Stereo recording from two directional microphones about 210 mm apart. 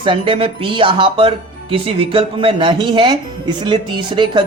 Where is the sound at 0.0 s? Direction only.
25° right (ahead or behind).